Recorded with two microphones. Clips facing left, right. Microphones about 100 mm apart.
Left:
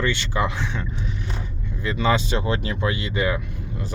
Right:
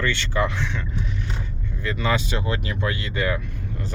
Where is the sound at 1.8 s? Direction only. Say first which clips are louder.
Left 3 dB; 20° left (ahead or behind).